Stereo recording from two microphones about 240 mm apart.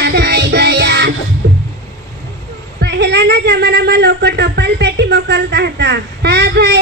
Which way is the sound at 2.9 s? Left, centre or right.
Right.